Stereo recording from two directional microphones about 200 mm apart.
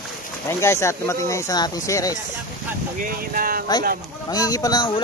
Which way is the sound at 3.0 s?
45° right (ahead or behind).